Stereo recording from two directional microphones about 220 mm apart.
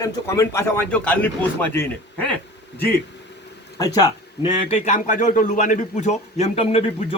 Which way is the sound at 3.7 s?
15° left (ahead or behind).